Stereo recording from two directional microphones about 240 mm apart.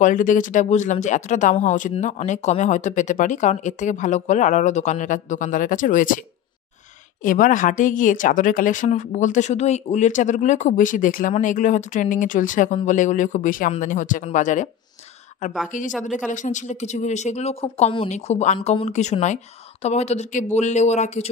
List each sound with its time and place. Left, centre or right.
0.0 s speech: left
7.2 s speech: left
15.7 s speech: left